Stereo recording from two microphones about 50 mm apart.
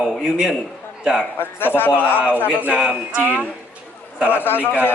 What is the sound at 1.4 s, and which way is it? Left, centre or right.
A man's voice, left.